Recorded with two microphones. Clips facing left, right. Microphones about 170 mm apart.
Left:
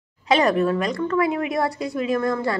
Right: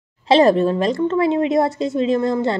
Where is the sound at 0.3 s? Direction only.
30° right (ahead or behind).